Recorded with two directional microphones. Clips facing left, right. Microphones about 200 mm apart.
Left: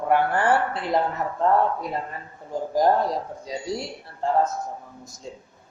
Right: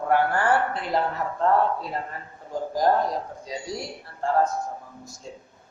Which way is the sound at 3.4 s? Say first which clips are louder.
Left 3 dB; 25° left (ahead or behind).